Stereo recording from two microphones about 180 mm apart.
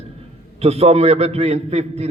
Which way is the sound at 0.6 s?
35° right (ahead or behind).